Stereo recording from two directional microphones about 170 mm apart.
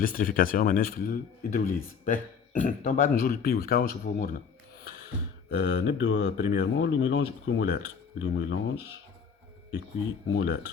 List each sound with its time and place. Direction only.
0.0 s speech: 55° left (ahead or behind)
5.5 s speech: 80° left
10.3 s speech: 80° left